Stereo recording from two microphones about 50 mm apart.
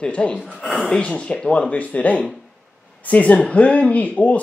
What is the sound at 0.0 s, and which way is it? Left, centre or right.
Speech, left.